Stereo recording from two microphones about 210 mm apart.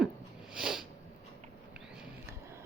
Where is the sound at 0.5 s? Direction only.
5° right (ahead or behind).